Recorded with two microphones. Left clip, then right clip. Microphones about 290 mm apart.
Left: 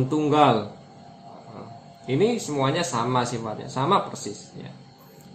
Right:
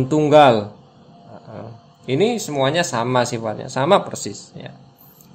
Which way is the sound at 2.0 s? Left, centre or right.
Right.